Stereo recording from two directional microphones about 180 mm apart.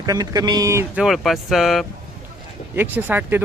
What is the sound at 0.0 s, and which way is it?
Speech, 20° right (ahead or behind).